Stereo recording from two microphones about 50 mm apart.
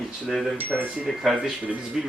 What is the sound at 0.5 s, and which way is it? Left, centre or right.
Speech, right.